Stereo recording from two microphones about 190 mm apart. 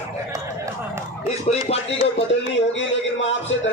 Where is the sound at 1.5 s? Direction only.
35° left (ahead or behind).